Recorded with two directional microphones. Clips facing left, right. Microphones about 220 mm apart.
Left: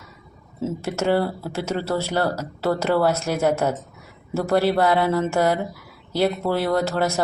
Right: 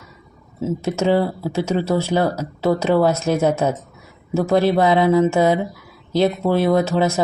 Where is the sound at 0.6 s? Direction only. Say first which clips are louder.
Right 4 dB; 15° right (ahead or behind).